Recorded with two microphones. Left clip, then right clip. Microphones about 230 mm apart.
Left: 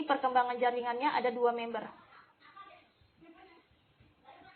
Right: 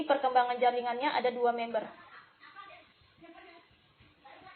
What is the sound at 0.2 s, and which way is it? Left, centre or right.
A woman's voice, left.